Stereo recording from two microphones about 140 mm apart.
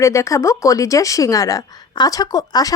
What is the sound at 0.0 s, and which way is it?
A woman's voice, 20° left (ahead or behind).